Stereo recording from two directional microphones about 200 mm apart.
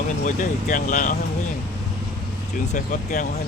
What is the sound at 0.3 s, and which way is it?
Speech, 40° left (ahead or behind).